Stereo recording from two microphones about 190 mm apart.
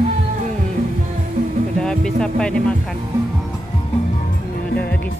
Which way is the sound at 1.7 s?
5° left (ahead or behind).